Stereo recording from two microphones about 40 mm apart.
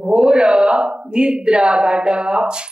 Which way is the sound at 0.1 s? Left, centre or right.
Right.